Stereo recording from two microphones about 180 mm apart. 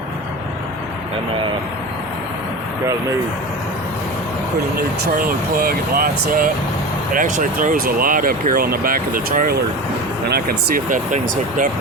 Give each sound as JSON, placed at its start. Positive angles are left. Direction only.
{"t": 5.1, "sound": "speech", "side_deg": -55}